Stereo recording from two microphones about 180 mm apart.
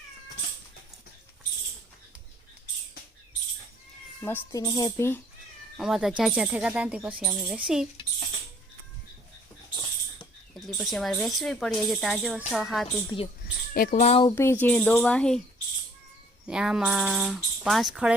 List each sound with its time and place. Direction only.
4.2 s speech: 15° left (ahead or behind)
5.7 s speech: centre (ahead or behind)
10.8 s speech: centre (ahead or behind)
13.1 s speech: 25° left (ahead or behind)
13.7 s speech: 55° left (ahead or behind)
14.0 s speech: 35° left (ahead or behind)
14.3 s speech: 15° left (ahead or behind)
16.5 s speech: 5° right (ahead or behind)